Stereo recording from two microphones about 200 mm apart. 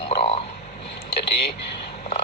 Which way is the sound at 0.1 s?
30° left (ahead or behind).